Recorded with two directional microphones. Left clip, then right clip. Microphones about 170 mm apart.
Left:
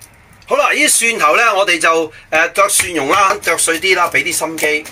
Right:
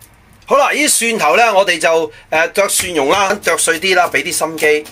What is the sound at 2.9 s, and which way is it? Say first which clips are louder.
Speech: left 1 dB; 35° right (ahead or behind).